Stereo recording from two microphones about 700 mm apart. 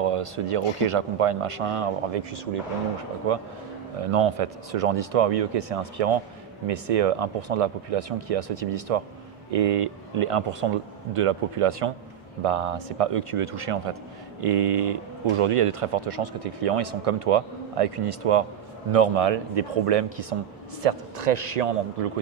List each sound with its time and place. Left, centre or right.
0.0 s speech: right
4.1 s speech: right
20.8 s a man's voice: right